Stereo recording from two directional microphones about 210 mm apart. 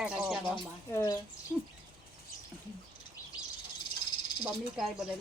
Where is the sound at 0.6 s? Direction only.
15° left (ahead or behind).